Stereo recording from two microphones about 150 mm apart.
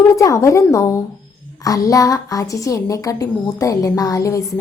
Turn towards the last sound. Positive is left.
turn(degrees=20)  # may be behind; listen again after turning